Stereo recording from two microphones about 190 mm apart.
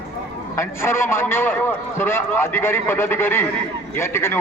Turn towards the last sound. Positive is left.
turn(degrees=15)  # may be behind; listen again after turning